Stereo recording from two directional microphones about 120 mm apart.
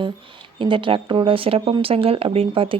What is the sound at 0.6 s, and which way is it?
Speech, 45° right (ahead or behind).